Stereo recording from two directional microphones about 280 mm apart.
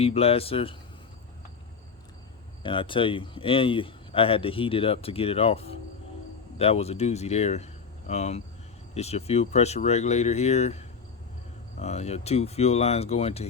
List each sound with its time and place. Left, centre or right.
0.0 s speech: left
2.6 s speech: centre